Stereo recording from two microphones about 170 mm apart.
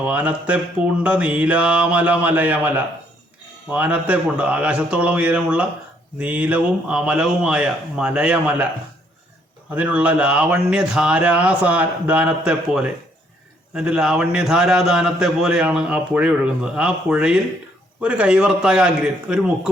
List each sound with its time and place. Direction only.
0.0 s speech: 10° right (ahead or behind)
9.7 s speech: 10° right (ahead or behind)